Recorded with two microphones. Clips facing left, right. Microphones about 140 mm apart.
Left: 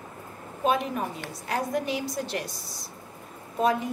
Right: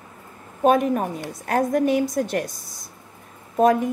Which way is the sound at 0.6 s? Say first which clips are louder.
Right 8 dB; 50° right (ahead or behind).